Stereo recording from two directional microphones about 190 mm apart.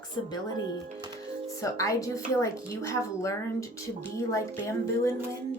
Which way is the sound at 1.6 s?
15° left (ahead or behind).